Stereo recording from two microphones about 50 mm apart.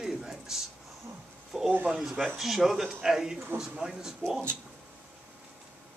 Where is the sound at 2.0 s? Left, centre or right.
Centre.